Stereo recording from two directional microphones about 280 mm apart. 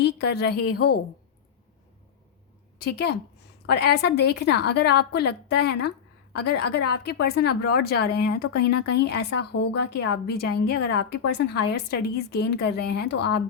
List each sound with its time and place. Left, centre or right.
0.0 s a woman's voice: left
0.5 s a woman's voice: left
2.7 s a woman's voice: left